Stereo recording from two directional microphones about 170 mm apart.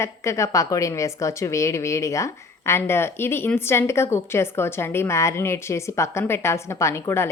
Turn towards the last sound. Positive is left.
turn(degrees=15)  # may be behind; listen again after turning